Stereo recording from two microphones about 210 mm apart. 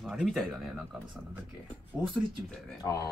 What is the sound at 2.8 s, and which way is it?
Speech, 15° left (ahead or behind).